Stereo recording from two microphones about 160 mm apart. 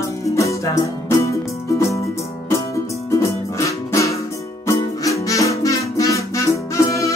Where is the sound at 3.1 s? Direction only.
20° left (ahead or behind).